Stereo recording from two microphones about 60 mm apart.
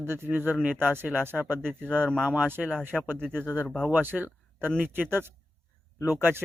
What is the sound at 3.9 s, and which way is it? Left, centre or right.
Speech, right.